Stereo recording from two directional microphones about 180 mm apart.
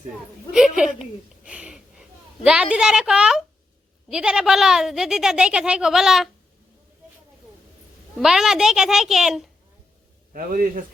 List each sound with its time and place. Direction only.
0.8 s a woman's voice: centre (ahead or behind)
8.2 s speech: centre (ahead or behind)
10.3 s a man's voice: 50° right (ahead or behind)